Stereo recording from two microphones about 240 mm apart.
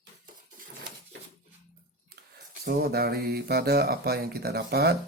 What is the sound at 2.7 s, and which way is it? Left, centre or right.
Speech, right.